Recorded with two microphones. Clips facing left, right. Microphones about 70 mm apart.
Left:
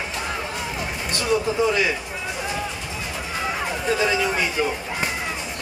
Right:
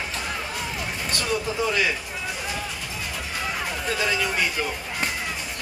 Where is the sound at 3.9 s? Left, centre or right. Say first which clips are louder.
Left 4 dB; centre.